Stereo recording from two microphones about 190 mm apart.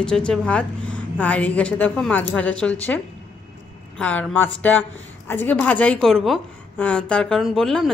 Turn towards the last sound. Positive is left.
turn(degrees=0)  # may be behind; listen again after turning